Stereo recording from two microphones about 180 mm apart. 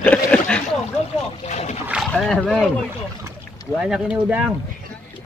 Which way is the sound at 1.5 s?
40° left (ahead or behind).